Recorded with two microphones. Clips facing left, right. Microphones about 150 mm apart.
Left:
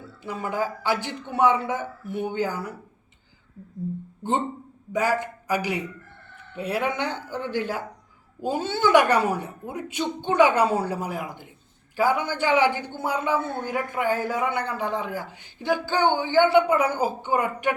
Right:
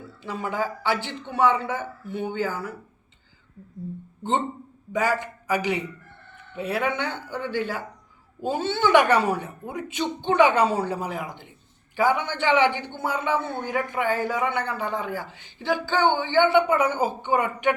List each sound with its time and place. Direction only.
0.2 s a woman's voice: 10° left (ahead or behind)
4.9 s a man's voice: 10° left (ahead or behind)